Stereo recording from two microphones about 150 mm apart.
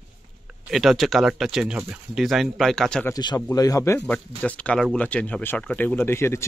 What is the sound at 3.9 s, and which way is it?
Speech, 10° left (ahead or behind).